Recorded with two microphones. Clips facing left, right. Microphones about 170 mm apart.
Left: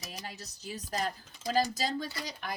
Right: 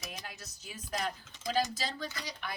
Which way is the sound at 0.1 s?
35° left (ahead or behind).